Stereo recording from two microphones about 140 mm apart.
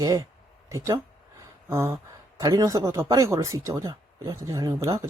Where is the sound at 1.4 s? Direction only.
20° right (ahead or behind).